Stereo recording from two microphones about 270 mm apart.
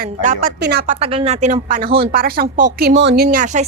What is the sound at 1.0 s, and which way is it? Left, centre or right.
A woman's voice, right.